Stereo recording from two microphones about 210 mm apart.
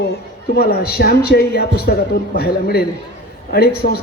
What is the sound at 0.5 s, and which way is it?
A man's voice, 45° left (ahead or behind).